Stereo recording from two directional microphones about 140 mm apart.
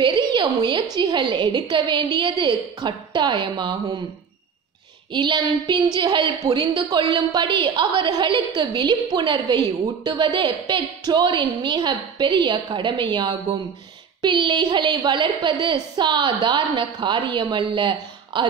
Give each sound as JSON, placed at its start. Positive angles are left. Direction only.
{"t": 0.0, "sound": "a sound", "side_deg": -35}
{"t": 0.9, "sound": "a woman's voice", "side_deg": -35}
{"t": 5.1, "sound": "a woman's voice", "side_deg": -35}